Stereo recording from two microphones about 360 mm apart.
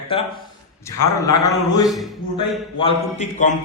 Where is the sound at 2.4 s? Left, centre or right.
Centre.